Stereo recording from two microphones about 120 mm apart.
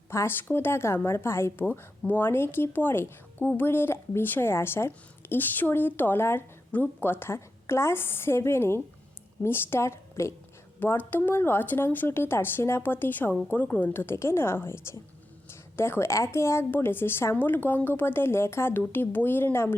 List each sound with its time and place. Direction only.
0.1 s a woman's voice: 20° left (ahead or behind)